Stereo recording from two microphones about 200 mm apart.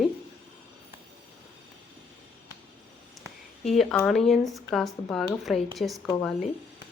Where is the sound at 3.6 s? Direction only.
Centre (ahead or behind).